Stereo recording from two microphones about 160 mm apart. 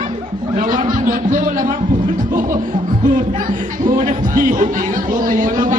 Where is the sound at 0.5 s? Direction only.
55° right (ahead or behind).